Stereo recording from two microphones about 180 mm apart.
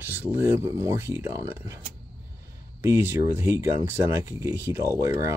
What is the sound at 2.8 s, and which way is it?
Speech, 15° right (ahead or behind).